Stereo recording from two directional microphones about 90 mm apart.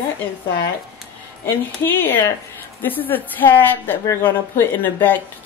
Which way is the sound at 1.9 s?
20° left (ahead or behind).